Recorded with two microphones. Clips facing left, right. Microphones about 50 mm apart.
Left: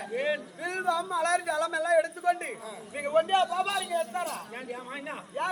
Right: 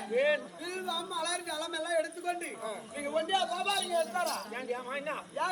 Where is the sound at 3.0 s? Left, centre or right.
Left.